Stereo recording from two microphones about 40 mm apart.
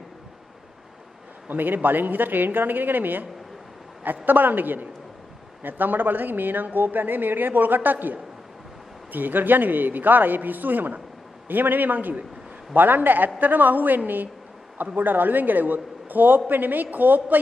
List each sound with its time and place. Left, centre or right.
1.5 s a woman's voice: right